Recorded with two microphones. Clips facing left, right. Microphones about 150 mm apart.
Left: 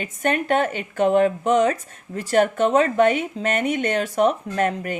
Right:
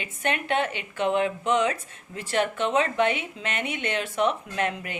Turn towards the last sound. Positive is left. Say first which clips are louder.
# left 6 dB
turn(degrees=45)  # may be behind; listen again after turning